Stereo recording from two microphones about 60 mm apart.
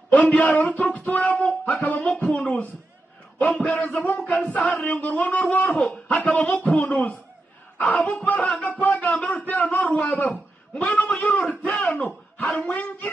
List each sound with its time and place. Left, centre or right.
0.1 s a man's voice: left
5.7 s a man's voice: centre
6.1 s speech: left
8.6 s music: left
10.7 s speech: left